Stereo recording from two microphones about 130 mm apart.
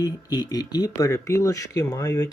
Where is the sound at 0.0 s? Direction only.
30° left (ahead or behind).